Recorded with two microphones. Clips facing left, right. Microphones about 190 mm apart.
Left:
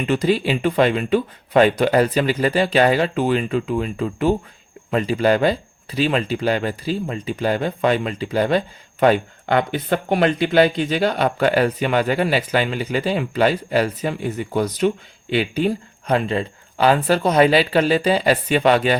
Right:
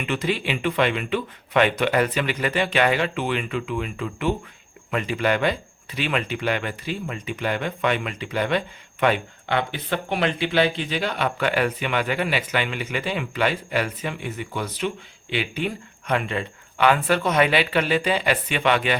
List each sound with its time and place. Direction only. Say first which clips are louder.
0.0 s speech: left 7 dB; 35° left (ahead or behind)